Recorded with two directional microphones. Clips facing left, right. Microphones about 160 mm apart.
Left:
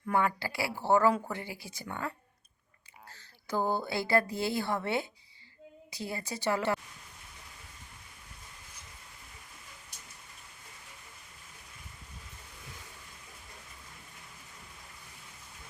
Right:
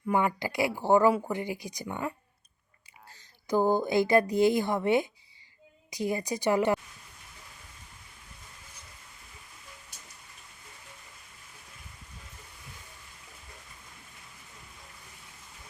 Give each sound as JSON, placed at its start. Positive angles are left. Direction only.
{"t": 0.0, "sound": "speech", "side_deg": -15}